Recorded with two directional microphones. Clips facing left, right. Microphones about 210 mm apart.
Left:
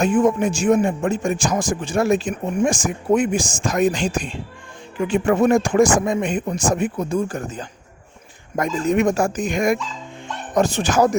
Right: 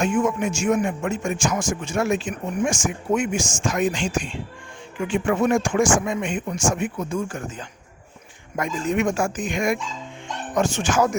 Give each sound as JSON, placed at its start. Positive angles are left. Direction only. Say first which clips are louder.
{"t": 0.0, "sound": "speech", "louder": "left 4 dB", "side_deg": 35}